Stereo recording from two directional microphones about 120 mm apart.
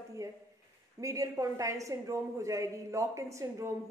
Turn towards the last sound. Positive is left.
turn(degrees=-25)  # may be behind; listen again after turning